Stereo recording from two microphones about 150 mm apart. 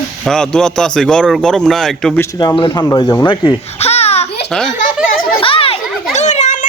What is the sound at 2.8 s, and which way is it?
Speech, 25° left (ahead or behind).